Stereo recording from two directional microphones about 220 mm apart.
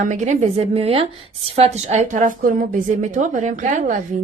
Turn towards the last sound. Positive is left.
turn(degrees=-35)  # may be behind; listen again after turning